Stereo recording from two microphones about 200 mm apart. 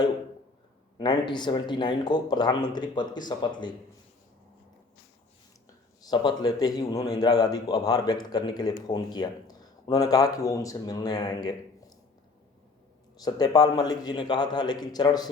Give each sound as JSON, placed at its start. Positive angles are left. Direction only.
{"t": 0.9, "sound": "a man's voice", "side_deg": 20}
{"t": 6.0, "sound": "a man's voice", "side_deg": 20}
{"t": 13.2, "sound": "a man's voice", "side_deg": 20}